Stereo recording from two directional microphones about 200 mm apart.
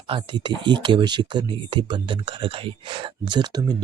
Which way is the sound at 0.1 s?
20° right (ahead or behind).